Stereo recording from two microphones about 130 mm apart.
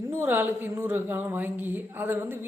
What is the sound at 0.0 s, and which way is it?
Speech, 20° right (ahead or behind).